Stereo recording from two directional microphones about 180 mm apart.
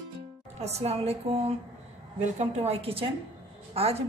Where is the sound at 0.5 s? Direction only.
35° right (ahead or behind).